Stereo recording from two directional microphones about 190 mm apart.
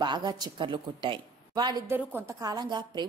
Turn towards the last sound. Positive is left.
turn(degrees=-25)  # may be behind; listen again after turning